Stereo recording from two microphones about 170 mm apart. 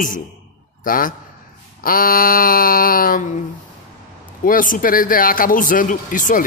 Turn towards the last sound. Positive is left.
turn(degrees=50)  # may be behind; listen again after turning